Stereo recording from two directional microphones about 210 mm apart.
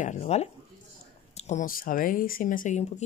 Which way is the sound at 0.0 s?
35° left (ahead or behind).